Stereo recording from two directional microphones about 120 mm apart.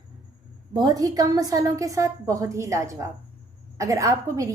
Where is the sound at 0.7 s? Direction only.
35° right (ahead or behind).